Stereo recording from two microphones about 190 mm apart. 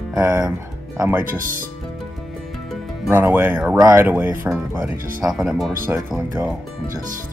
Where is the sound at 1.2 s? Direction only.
45° right (ahead or behind).